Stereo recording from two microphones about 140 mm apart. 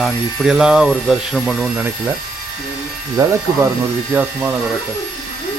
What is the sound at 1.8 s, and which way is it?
Speech, 15° right (ahead or behind).